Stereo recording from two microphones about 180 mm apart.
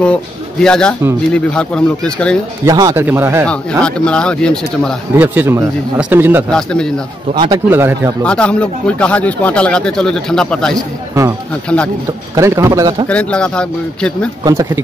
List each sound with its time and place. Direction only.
0.0 s speech: 5° left (ahead or behind)
2.6 s a man's voice: 20° right (ahead or behind)
3.4 s speech: 5° left (ahead or behind)
5.1 s a man's voice: 10° right (ahead or behind)
6.5 s speech: 5° left (ahead or behind)
7.3 s speech: 25° right (ahead or behind)
7.7 s a man's voice: 15° right (ahead or behind)
8.2 s speech: 5° left (ahead or behind)
12.4 s a man's voice: 15° right (ahead or behind)
13.1 s speech: 5° left (ahead or behind)
14.4 s speech: 20° right (ahead or behind)